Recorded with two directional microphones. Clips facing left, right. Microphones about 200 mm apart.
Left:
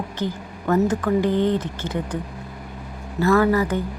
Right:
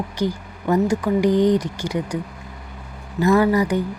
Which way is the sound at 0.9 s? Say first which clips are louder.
Right 2 dB; 10° right (ahead or behind).